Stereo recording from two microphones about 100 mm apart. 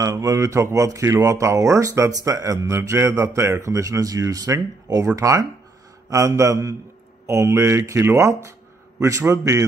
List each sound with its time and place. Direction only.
0.0 s speech: 35° right (ahead or behind)